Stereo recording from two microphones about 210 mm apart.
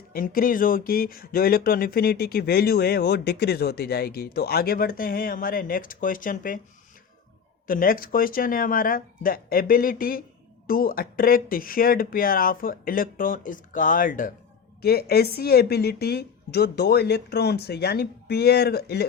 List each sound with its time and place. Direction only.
0.1 s speech: 40° left (ahead or behind)
7.7 s speech: 40° left (ahead or behind)